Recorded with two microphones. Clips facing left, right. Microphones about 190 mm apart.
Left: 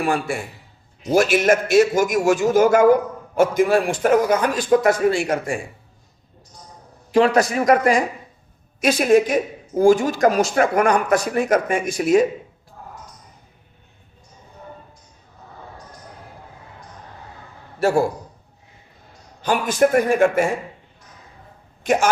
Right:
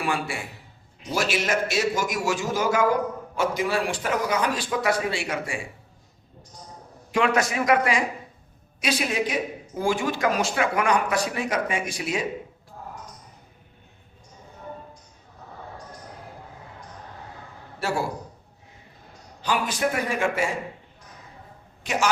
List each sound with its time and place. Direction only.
0.0 s speech: 45° left (ahead or behind)
7.1 s a man's voice: 35° left (ahead or behind)
17.7 s a man's voice: 50° left (ahead or behind)
19.4 s speech: 50° left (ahead or behind)
21.8 s speech: 50° left (ahead or behind)